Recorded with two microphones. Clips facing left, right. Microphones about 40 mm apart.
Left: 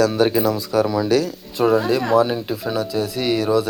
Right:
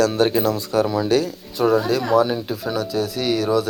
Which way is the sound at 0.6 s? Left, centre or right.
Right.